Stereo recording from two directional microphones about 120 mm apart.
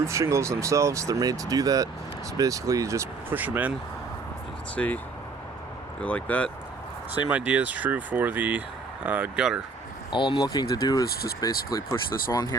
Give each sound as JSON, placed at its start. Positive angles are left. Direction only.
{"t": 0.0, "sound": "speech", "side_deg": -25}
{"t": 4.7, "sound": "speech", "side_deg": 10}
{"t": 6.0, "sound": "speech", "side_deg": 10}
{"t": 7.3, "sound": "speech", "side_deg": -10}
{"t": 10.1, "sound": "speech", "side_deg": 40}